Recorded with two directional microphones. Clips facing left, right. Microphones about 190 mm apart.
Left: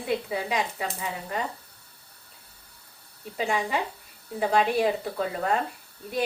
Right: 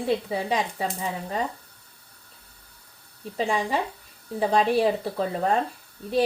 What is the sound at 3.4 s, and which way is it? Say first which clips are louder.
Speech: right 2 dB; 30° right (ahead or behind).